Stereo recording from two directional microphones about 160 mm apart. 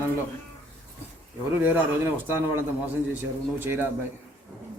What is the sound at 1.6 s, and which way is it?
A man's voice, 15° right (ahead or behind).